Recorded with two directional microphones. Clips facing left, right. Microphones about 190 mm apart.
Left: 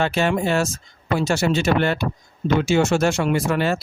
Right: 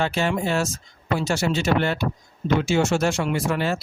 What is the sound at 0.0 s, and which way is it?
Speech, 60° left (ahead or behind).